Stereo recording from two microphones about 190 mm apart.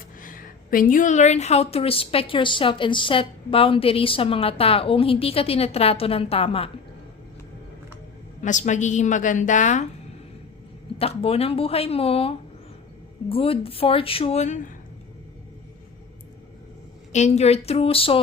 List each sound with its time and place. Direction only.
0.2 s a woman's voice: 45° left (ahead or behind); by 6.7 s 30° left (ahead or behind)
8.4 s a woman's voice: 40° left (ahead or behind)
10.9 s a woman's voice: 30° left (ahead or behind)
17.1 s a woman's voice: 35° left (ahead or behind)